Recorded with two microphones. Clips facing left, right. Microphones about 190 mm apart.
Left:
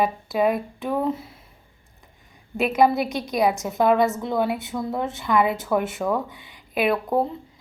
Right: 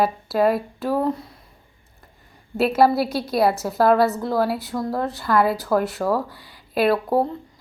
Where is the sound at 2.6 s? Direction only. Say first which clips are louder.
Right 2 dB; 15° left (ahead or behind).